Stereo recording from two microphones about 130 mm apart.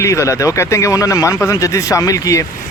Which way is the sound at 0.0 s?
25° left (ahead or behind).